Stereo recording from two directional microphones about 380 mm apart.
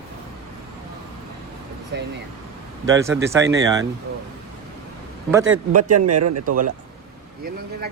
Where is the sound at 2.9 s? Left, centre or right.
Centre.